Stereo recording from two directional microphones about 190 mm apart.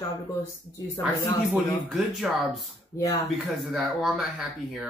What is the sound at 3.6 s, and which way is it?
Speech, centre (ahead or behind).